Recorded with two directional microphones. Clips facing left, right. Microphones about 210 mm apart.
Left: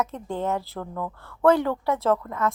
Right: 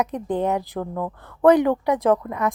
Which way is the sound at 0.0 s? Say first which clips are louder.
Right 5 dB; 15° right (ahead or behind).